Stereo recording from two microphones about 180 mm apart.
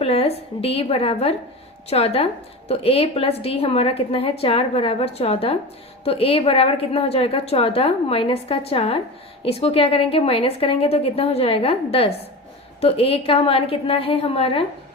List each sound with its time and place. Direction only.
0.0 s a woman's voice: 35° left (ahead or behind)